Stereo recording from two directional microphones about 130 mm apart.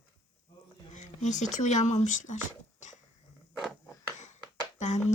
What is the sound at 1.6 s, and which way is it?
Speech, 65° left (ahead or behind).